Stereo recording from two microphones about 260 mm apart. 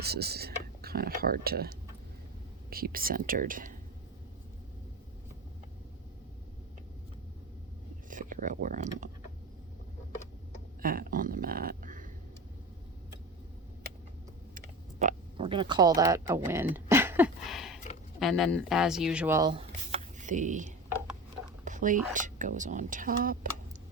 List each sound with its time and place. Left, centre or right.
0.0 s speech: right
8.1 s speech: right
10.8 s a sound: right
14.5 s speech: right; by 16.6 s centre
16.7 s a sound: centre
18.2 s a woman's voice: centre; by 23.5 s right